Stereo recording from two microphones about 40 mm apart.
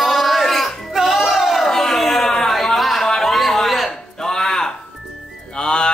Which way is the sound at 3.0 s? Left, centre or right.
Centre.